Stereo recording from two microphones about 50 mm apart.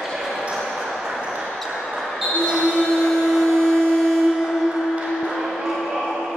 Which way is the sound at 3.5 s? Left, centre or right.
Centre.